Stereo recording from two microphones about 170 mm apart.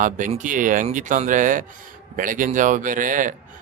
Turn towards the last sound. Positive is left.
turn(degrees=-50)  # may be behind; listen again after turning